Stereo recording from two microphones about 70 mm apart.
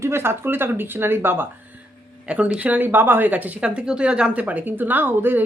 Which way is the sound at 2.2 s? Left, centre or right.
Centre.